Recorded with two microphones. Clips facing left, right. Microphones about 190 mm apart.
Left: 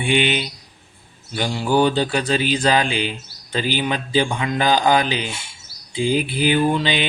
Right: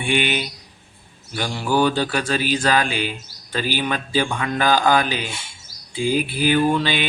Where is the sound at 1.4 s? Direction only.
20° left (ahead or behind).